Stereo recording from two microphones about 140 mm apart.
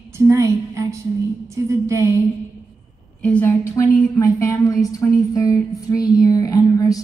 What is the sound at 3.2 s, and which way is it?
A woman's voice, 10° left (ahead or behind).